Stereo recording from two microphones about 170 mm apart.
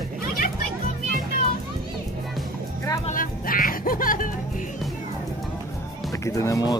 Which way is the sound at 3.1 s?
55° left (ahead or behind).